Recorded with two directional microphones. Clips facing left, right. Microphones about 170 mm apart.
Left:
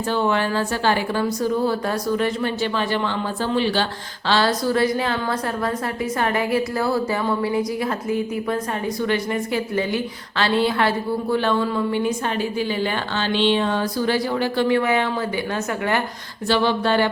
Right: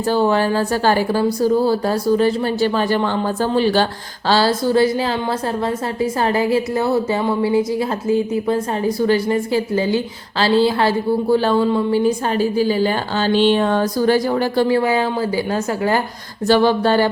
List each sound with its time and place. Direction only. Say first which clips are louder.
0.1 s a woman's voice: right 5 dB; 35° right (ahead or behind)
16.5 s a woman's voice: right 5 dB; 45° right (ahead or behind)